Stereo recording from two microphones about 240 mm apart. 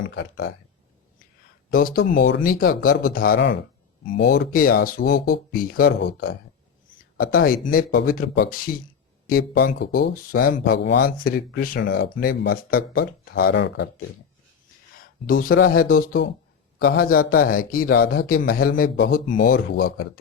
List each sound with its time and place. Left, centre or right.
0.0 s speech: left
1.7 s speech: left
4.0 s speech: left
15.3 s speech: left